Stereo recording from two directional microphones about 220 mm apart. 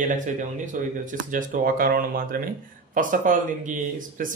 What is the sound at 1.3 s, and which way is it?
Speech, 35° right (ahead or behind).